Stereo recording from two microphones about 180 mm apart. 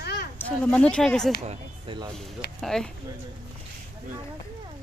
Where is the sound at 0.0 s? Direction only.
65° left (ahead or behind).